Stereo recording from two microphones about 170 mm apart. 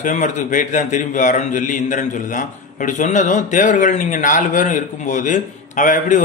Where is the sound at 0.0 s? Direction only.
45° left (ahead or behind).